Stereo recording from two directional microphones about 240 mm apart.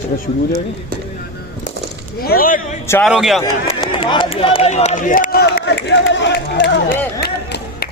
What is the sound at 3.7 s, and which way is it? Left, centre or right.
Speech, centre.